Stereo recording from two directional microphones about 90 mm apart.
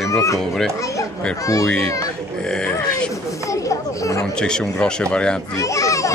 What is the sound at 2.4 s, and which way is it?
Speech, 10° left (ahead or behind).